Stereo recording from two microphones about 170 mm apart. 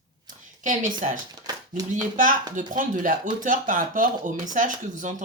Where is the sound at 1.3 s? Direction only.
25° right (ahead or behind).